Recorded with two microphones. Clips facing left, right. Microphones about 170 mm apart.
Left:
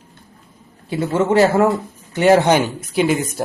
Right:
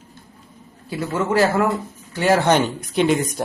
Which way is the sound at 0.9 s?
25° left (ahead or behind).